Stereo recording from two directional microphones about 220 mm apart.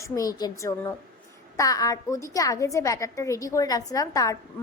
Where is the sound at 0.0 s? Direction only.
15° left (ahead or behind).